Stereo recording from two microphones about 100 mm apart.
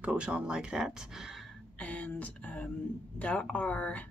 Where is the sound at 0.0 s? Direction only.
10° right (ahead or behind).